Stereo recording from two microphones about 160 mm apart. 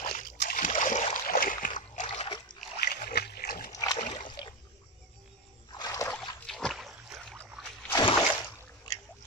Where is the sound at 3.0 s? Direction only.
75° left (ahead or behind).